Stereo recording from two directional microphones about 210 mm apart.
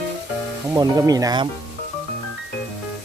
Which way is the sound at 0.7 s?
15° right (ahead or behind).